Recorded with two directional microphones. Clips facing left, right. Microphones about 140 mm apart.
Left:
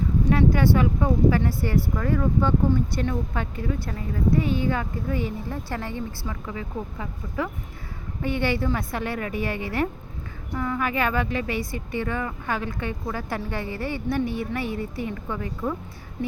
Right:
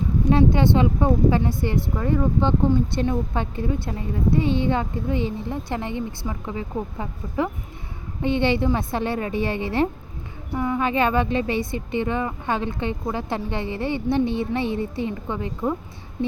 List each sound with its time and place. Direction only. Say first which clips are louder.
0.3 s speech: right 3 dB; 25° right (ahead or behind)